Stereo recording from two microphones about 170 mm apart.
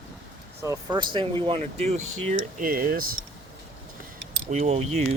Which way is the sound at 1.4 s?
35° right (ahead or behind).